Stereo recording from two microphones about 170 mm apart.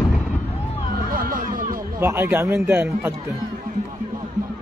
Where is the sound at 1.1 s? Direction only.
55° right (ahead or behind).